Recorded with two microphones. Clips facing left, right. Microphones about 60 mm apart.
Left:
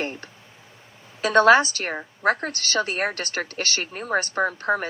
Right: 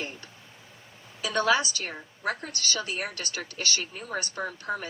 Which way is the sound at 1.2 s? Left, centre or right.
Left.